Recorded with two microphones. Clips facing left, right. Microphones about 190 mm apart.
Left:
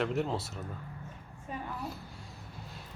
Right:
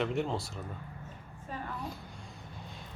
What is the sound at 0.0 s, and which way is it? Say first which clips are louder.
Speech: even; centre (ahead or behind).